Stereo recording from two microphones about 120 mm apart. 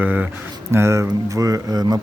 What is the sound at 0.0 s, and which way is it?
Speech, 15° right (ahead or behind).